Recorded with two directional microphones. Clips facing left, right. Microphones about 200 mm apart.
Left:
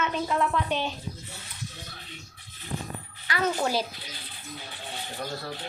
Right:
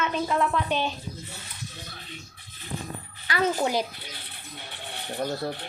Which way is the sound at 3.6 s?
15° right (ahead or behind).